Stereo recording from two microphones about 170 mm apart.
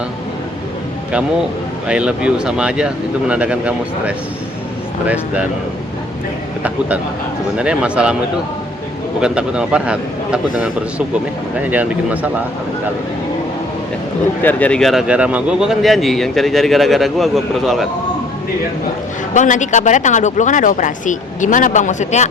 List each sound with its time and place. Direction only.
1.9 s speech: 5° right (ahead or behind)
6.6 s speech: 10° right (ahead or behind)
9.2 s speech: 5° right (ahead or behind)
14.4 s speech: 5° left (ahead or behind)
19.3 s speech: 45° left (ahead or behind)